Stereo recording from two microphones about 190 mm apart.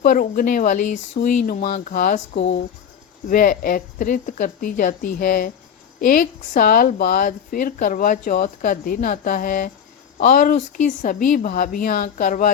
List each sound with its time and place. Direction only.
0.0 s speech: 45° left (ahead or behind)